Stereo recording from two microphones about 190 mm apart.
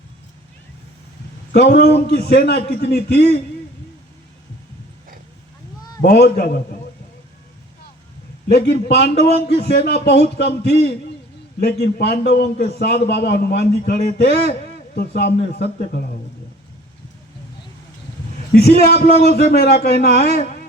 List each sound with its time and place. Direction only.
1.5 s a man's voice: 60° left (ahead or behind)
6.0 s a man's voice: 55° left (ahead or behind)
8.4 s a man's voice: 60° left (ahead or behind)
18.5 s a man's voice: 55° left (ahead or behind)